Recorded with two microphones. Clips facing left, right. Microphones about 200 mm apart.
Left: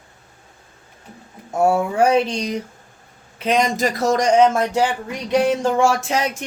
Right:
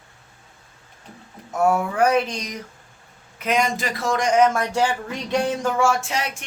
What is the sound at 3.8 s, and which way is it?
Speech, 40° left (ahead or behind).